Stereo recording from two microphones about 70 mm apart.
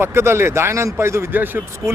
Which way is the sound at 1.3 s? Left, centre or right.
Right.